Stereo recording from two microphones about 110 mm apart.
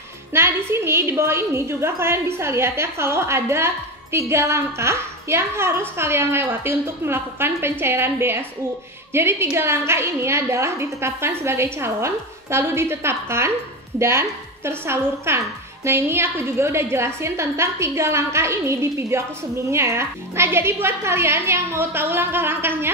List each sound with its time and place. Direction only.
0.3 s a woman's voice: 25° right (ahead or behind)